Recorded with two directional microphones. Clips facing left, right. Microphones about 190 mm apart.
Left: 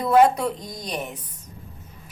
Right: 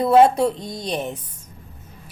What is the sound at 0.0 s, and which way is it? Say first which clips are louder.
A woman's voice: right 3 dB; 25° right (ahead or behind).